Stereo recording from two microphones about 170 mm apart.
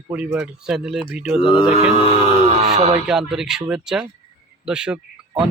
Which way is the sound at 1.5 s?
35° left (ahead or behind).